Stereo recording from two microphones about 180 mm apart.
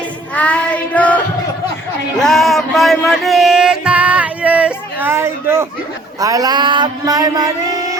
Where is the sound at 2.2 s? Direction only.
Centre (ahead or behind).